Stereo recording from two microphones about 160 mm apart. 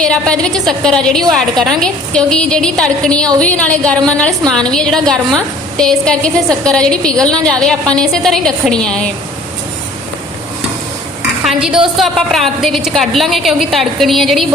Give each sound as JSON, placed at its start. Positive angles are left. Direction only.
{"t": 0.0, "sound": "a woman's voice", "side_deg": 5}
{"t": 11.4, "sound": "a woman's voice", "side_deg": -5}